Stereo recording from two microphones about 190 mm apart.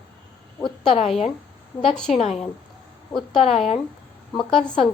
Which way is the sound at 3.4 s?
35° left (ahead or behind).